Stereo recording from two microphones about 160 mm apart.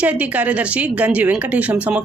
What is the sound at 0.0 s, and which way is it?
Speech, 10° right (ahead or behind).